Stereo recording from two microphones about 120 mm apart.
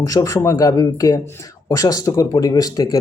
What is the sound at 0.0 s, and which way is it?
Speech, 30° left (ahead or behind).